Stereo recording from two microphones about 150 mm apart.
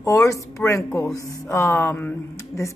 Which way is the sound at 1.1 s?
20° left (ahead or behind).